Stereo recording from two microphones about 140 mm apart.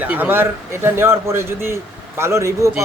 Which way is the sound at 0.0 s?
10° right (ahead or behind).